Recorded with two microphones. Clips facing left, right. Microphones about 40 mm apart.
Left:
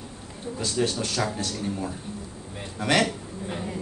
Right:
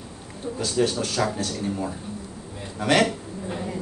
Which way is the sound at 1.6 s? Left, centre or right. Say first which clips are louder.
Right 2 dB; centre.